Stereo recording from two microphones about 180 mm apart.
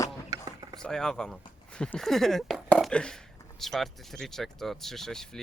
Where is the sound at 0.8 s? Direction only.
5° left (ahead or behind).